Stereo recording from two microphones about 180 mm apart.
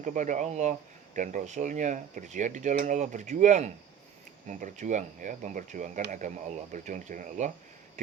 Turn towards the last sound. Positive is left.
turn(degrees=-45)  # may be behind; listen again after turning